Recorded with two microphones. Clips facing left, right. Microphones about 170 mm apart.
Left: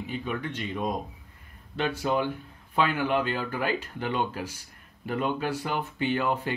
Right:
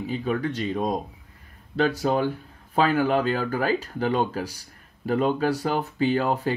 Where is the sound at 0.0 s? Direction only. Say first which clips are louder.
Right 6 dB; 35° right (ahead or behind).